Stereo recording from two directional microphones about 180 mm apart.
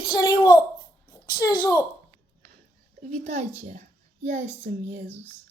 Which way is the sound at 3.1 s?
40° right (ahead or behind).